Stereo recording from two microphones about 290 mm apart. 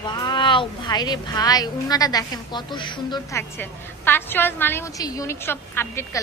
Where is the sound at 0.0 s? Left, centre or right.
Centre.